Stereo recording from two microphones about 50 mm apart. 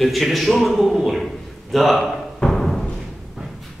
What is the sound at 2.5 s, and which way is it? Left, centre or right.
Music, centre.